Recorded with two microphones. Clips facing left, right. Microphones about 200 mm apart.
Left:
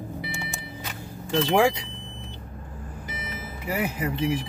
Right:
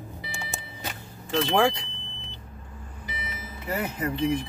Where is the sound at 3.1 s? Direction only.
50° left (ahead or behind).